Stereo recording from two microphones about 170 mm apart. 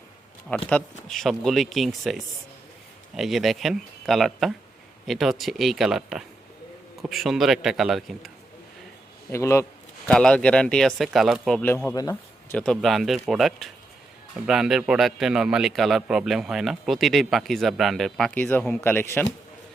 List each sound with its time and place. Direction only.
0.5 s a man's voice: 10° left (ahead or behind)
9.3 s a man's voice: 15° left (ahead or behind)
10.1 s a man's voice: 5° left (ahead or behind)
11.6 s a man's voice: 10° left (ahead or behind)
11.9 s a sound: 20° left (ahead or behind)
12.5 s a man's voice: 5° left (ahead or behind)